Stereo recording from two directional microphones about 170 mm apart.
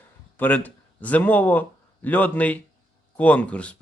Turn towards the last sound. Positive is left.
turn(degrees=5)  # may be behind; listen again after turning